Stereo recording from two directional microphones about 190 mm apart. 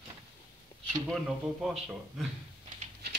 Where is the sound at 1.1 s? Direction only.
Centre (ahead or behind).